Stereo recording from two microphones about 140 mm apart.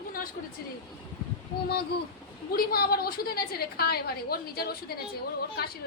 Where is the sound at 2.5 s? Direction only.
90° left.